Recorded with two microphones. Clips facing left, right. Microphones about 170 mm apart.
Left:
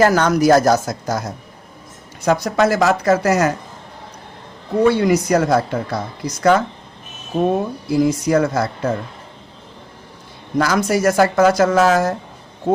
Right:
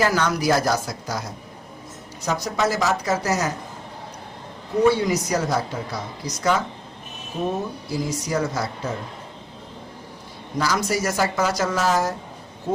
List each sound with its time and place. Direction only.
0.0 s speech: 45° left (ahead or behind)
2.2 s a woman's voice: 60° left (ahead or behind)
4.9 s a woman's voice: 60° left (ahead or behind)
10.6 s a woman's voice: 55° left (ahead or behind)